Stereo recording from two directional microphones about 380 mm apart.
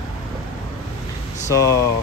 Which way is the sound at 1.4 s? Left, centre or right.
Centre.